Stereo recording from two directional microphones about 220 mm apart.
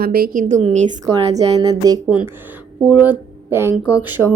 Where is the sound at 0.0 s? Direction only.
45° right (ahead or behind).